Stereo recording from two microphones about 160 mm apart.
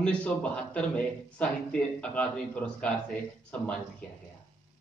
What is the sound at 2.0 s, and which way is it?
Speech, 10° left (ahead or behind).